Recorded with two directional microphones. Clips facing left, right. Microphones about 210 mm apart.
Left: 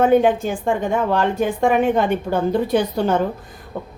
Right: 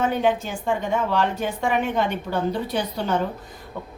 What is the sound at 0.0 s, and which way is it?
A woman's voice, 50° left (ahead or behind).